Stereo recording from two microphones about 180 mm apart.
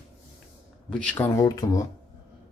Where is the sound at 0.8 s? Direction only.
5° left (ahead or behind); by 1.9 s 20° left (ahead or behind).